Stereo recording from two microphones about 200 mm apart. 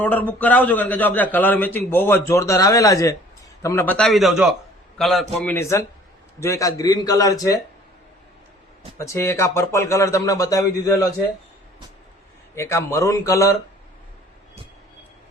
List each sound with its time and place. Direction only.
0.0 s a man's voice: 10° left (ahead or behind)
9.0 s a man's voice: 15° left (ahead or behind)
12.5 s a man's voice: 15° left (ahead or behind)